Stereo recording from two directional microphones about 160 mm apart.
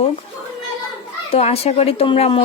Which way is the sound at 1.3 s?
40° left (ahead or behind).